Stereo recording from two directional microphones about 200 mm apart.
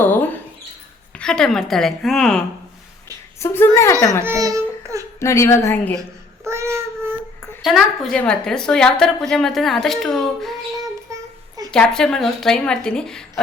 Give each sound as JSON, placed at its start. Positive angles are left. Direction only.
{"t": 0.0, "sound": "mouse", "side_deg": 10}
{"t": 1.1, "sound": "a woman's voice", "side_deg": 5}
{"t": 3.4, "sound": "a woman's voice", "side_deg": 10}
{"t": 4.2, "sound": "a sound", "side_deg": -15}
{"t": 5.2, "sound": "a woman's voice", "side_deg": 15}
{"t": 6.0, "sound": "babbling", "side_deg": -15}
{"t": 7.6, "sound": "a woman's voice", "side_deg": 0}
{"t": 11.1, "sound": "a sound", "side_deg": -15}
{"t": 11.7, "sound": "a woman's voice", "side_deg": 5}